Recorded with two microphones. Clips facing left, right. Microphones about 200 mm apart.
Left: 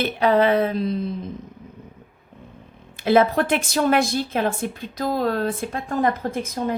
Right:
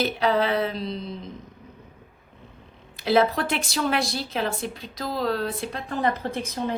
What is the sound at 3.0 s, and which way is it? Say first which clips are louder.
A woman's voice: left 4 dB; 50° left (ahead or behind).